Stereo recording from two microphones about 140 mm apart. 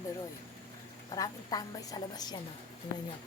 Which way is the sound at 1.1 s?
25° left (ahead or behind).